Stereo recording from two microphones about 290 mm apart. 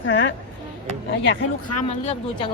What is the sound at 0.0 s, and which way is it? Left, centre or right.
Speech, left.